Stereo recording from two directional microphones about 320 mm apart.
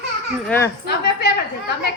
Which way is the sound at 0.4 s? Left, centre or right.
Centre.